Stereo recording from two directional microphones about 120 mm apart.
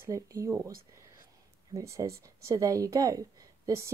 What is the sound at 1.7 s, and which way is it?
A woman's voice, 25° right (ahead or behind).